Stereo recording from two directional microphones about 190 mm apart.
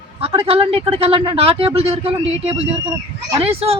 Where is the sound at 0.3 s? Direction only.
30° right (ahead or behind).